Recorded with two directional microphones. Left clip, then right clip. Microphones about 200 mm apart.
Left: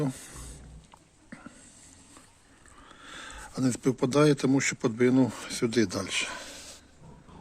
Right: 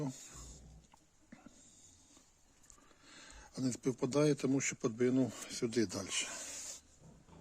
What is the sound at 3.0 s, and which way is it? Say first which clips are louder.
Speech: left 14 dB; centre (ahead or behind).